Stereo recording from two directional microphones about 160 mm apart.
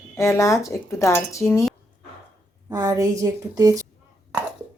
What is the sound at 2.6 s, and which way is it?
A woman's voice, 20° right (ahead or behind).